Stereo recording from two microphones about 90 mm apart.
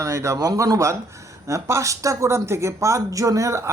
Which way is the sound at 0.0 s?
35° right (ahead or behind).